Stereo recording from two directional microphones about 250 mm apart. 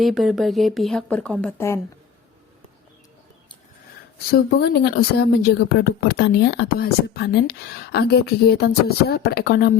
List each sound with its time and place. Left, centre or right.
0.0 s a woman's voice: centre
4.3 s speech: left